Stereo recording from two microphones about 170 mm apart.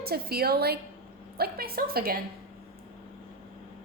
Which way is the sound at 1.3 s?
65° right (ahead or behind).